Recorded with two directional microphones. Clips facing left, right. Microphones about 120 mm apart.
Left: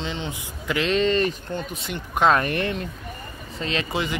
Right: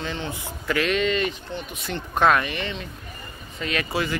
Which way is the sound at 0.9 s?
35° left (ahead or behind).